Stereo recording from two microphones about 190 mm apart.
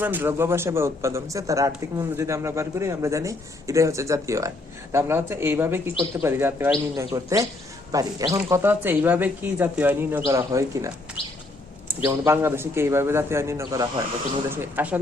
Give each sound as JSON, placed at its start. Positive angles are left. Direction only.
{"t": 0.0, "sound": "a man's voice", "side_deg": -10}
{"t": 11.2, "sound": "bird", "side_deg": 30}
{"t": 11.9, "sound": "a man's voice", "side_deg": -15}